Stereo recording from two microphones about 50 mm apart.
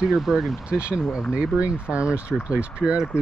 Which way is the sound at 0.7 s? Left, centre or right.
Right.